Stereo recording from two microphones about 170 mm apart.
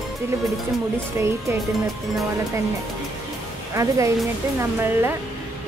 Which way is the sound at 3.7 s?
20° right (ahead or behind).